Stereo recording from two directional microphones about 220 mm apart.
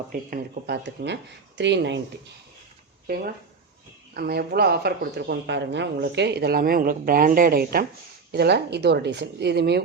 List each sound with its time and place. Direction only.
0.1 s speech: 45° right (ahead or behind)
4.1 s speech: 45° right (ahead or behind)